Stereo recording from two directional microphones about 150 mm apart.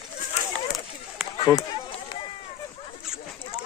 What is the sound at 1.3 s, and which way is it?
Run, 30° left (ahead or behind).